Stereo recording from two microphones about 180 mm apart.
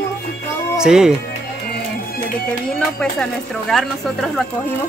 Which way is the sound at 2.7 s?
5° left (ahead or behind).